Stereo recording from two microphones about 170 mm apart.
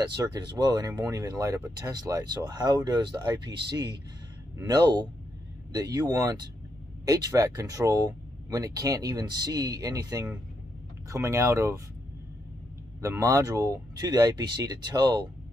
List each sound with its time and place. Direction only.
0.0 s speech: 25° right (ahead or behind)
13.0 s speech: 20° right (ahead or behind)